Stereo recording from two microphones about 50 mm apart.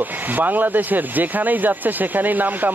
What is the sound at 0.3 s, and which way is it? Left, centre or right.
Speech, right.